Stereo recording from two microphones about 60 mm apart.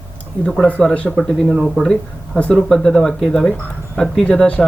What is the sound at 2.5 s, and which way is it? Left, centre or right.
A man's voice, centre.